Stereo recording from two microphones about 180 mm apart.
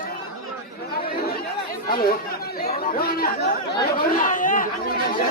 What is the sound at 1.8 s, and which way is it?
Chatter, 55° left (ahead or behind).